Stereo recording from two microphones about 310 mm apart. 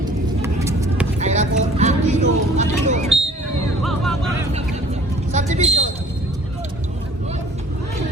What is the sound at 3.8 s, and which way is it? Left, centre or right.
Music, centre.